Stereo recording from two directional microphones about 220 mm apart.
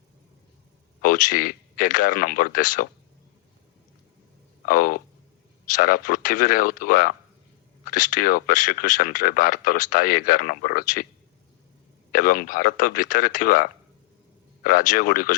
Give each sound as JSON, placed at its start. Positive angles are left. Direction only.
{"t": 1.0, "sound": "speech", "side_deg": 40}
{"t": 4.6, "sound": "speech", "side_deg": 40}
{"t": 12.1, "sound": "speech", "side_deg": 40}